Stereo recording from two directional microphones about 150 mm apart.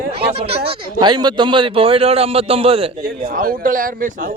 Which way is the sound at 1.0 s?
30° right (ahead or behind).